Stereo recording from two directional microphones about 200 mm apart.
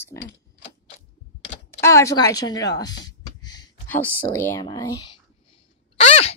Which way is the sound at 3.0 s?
20° left (ahead or behind).